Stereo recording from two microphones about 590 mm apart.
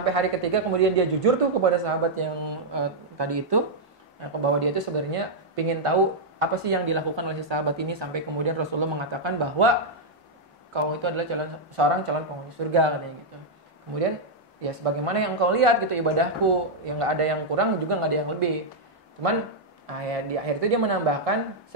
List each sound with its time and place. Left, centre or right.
0.0 s speech: right
4.2 s speech: right
10.7 s speech: right
14.6 s speech: right
20.6 s speech: right